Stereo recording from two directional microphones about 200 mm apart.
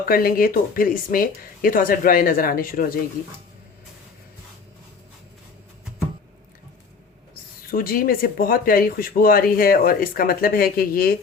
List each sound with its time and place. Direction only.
0.0 s speech: 45° left (ahead or behind)
7.7 s speech: 45° left (ahead or behind)